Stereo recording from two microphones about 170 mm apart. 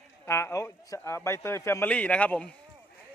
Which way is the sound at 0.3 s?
15° left (ahead or behind).